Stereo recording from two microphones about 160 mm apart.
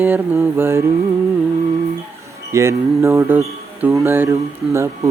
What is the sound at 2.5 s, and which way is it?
Speech, 20° right (ahead or behind).